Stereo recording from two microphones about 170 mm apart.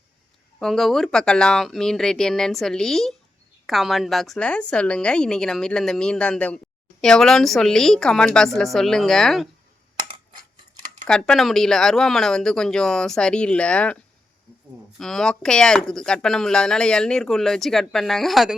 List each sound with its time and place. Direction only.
0.6 s speech: centre (ahead or behind)
11.0 s speech: 5° left (ahead or behind)